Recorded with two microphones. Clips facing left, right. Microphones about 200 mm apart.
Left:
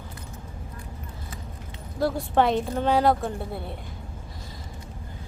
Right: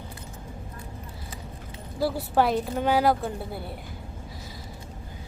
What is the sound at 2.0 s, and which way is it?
A woman's voice, 5° right (ahead or behind).